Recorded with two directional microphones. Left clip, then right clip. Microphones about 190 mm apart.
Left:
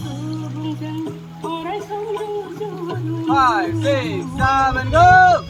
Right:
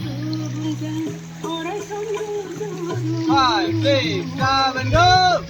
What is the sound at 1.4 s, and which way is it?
Music, 25° right (ahead or behind).